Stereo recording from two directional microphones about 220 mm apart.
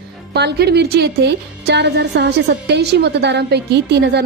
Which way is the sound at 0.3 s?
50° right (ahead or behind).